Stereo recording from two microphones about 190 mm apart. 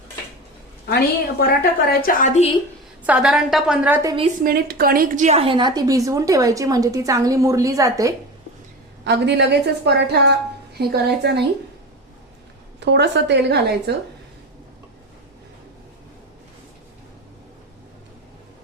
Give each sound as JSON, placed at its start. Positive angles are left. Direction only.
{"t": 0.9, "sound": "a woman's voice", "side_deg": 55}
{"t": 3.1, "sound": "a woman's voice", "side_deg": -5}
{"t": 4.4, "sound": "a woman's voice", "side_deg": -50}
{"t": 9.0, "sound": "a woman's voice", "side_deg": -65}
{"t": 12.8, "sound": "a woman's voice", "side_deg": -65}